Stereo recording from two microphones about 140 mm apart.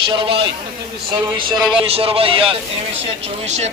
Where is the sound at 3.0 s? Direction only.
55° right (ahead or behind).